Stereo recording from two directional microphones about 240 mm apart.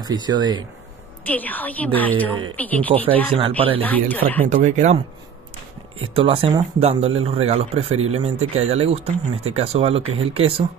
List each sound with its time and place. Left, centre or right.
0.0 s speech: centre
1.2 s a woman's voice: centre
3.3 s speech: right
3.8 s a woman's voice: centre
4.5 s speech: right